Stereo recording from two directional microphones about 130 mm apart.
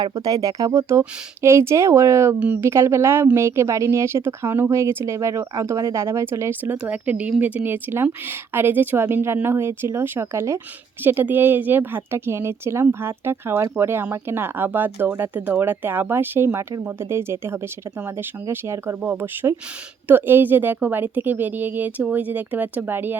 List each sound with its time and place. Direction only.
0.0 s speech: 30° right (ahead or behind)